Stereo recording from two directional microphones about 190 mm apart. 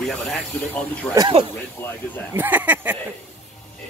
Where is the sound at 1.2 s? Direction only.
25° right (ahead or behind).